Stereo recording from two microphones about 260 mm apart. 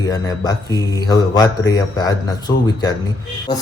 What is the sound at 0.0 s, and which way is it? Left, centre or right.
Speech, centre.